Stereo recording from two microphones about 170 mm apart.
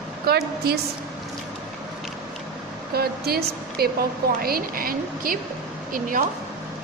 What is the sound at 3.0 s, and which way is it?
Speech, 65° right (ahead or behind).